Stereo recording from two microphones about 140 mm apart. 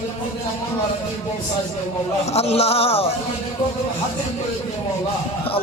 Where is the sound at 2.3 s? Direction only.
50° left (ahead or behind).